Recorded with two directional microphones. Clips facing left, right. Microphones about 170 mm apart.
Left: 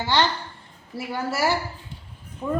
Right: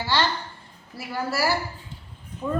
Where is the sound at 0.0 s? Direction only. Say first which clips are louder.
Left 2 dB; 20° left (ahead or behind).